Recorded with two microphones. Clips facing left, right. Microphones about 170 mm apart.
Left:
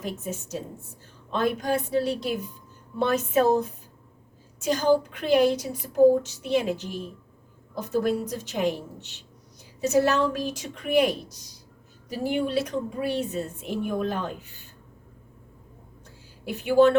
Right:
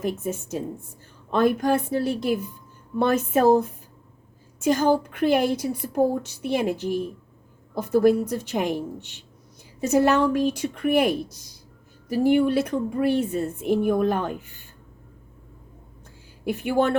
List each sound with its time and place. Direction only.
0.0 s a woman's voice: 50° right (ahead or behind)
16.5 s a woman's voice: 55° right (ahead or behind)